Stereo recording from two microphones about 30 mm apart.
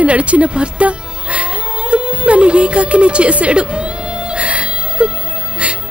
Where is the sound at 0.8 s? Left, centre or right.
Right.